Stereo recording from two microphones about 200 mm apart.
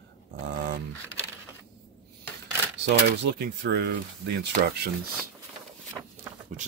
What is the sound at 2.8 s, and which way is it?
Speech, 55° right (ahead or behind).